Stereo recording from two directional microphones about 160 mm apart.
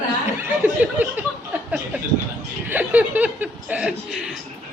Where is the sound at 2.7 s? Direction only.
10° right (ahead or behind).